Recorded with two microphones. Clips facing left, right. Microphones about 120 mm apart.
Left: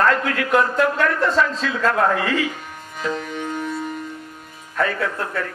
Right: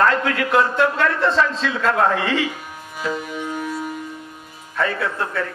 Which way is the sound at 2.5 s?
5° right (ahead or behind).